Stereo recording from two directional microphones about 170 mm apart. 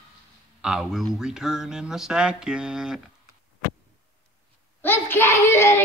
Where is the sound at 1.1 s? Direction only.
5° right (ahead or behind).